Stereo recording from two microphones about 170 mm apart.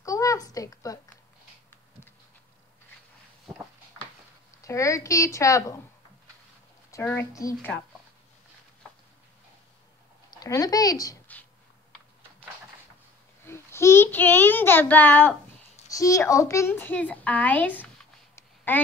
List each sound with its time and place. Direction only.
0.0 s a sound: 20° left (ahead or behind)
4.6 s speech: 20° left (ahead or behind)
6.9 s a child's voice: 15° left (ahead or behind)
7.5 s speech: 5° left (ahead or behind)
10.3 s speech: 20° left (ahead or behind)
13.5 s a child's voice: 15° left (ahead or behind)